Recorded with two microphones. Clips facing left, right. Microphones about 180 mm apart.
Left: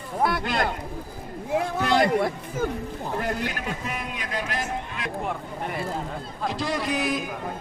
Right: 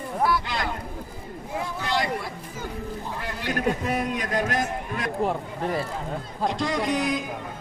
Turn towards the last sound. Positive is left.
turn(degrees=5)  # may be behind; listen again after turning